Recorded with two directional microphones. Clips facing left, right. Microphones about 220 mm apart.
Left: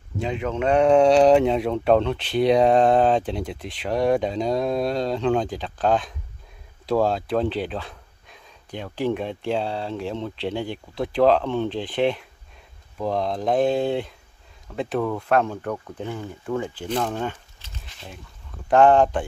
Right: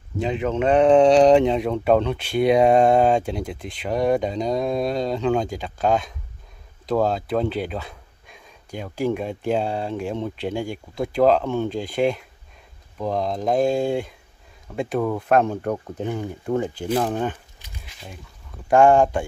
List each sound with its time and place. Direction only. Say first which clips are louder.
0.2 s speech: right 3 dB; 5° right (ahead or behind)
14.9 s speech: right 2 dB; 15° right (ahead or behind)
15.3 s speech: right 3 dB; 45° right (ahead or behind)
15.6 s speech: right 4 dB; 30° right (ahead or behind)
17.1 s a sound: right 3 dB; 15° right (ahead or behind)
17.8 s a sound: even; centre (ahead or behind)
18.7 s speech: right 1 dB; 10° right (ahead or behind)